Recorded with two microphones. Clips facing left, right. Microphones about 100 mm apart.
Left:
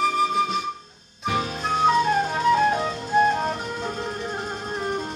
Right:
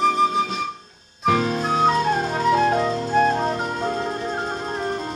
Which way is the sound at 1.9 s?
40° right (ahead or behind).